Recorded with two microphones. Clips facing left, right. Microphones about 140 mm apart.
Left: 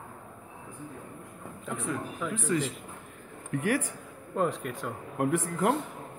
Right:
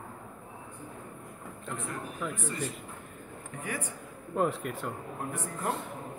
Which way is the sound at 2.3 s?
90° left.